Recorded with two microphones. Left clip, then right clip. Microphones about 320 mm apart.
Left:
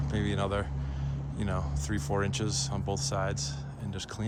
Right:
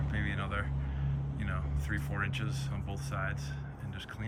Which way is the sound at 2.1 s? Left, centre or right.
Centre.